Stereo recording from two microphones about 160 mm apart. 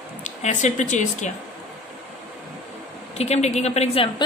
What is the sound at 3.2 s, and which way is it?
Speech, 45° left (ahead or behind).